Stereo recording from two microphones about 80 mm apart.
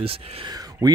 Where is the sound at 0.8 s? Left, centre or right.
Right.